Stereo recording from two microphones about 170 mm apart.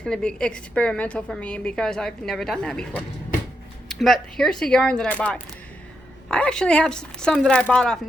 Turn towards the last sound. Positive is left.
turn(degrees=5)  # may be behind; listen again after turning